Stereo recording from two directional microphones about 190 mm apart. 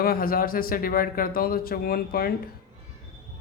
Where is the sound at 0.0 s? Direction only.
50° left (ahead or behind).